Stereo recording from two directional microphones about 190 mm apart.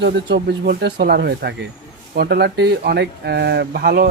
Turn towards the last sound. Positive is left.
turn(degrees=-55)  # may be behind; listen again after turning